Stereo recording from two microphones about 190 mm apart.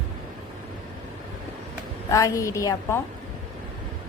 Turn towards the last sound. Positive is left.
turn(degrees=15)  # may be behind; listen again after turning